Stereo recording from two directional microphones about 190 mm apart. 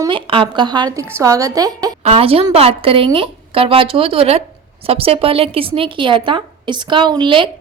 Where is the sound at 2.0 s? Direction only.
30° right (ahead or behind).